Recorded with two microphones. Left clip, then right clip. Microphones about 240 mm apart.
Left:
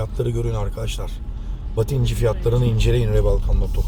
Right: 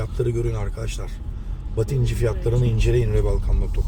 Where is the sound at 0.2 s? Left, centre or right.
Centre.